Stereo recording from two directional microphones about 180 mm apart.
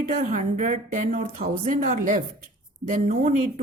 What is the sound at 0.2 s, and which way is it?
Speech, 45° right (ahead or behind).